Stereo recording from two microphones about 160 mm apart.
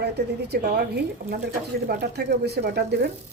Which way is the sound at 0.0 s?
90° right.